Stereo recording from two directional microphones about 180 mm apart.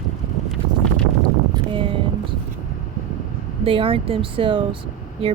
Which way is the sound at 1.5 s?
30° right (ahead or behind).